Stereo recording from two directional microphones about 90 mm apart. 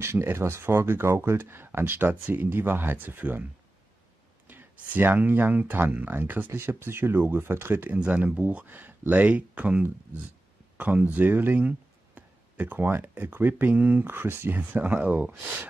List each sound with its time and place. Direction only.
0.0 s speech: 30° right (ahead or behind)
4.5 s speech: 20° right (ahead or behind)